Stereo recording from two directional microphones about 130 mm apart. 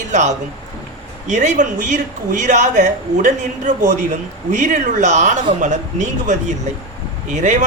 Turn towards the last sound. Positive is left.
turn(degrees=-70)  # may be behind; listen again after turning